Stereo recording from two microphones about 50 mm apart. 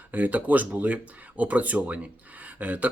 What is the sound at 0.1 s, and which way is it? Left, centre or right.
Speech, right.